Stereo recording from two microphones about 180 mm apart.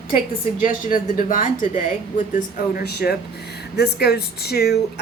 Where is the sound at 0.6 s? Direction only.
50° left (ahead or behind).